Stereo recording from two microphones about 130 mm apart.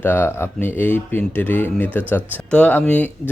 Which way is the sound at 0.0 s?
15° left (ahead or behind).